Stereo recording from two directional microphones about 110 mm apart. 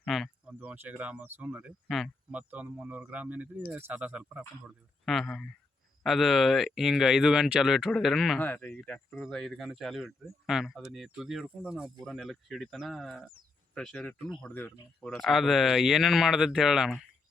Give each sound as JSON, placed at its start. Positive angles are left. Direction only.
{"t": 0.0, "sound": "speech", "side_deg": 0}
{"t": 0.6, "sound": "speech", "side_deg": -15}
{"t": 5.0, "sound": "speech", "side_deg": 0}
{"t": 8.4, "sound": "speech", "side_deg": 15}
{"t": 9.1, "sound": "speech", "side_deg": 5}
{"t": 15.0, "sound": "speech", "side_deg": 0}